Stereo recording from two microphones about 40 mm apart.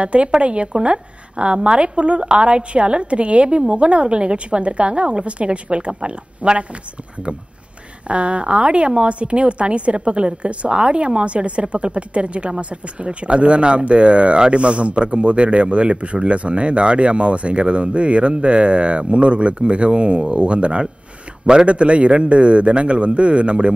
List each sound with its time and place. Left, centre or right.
0.0 s speech: right
8.1 s speech: right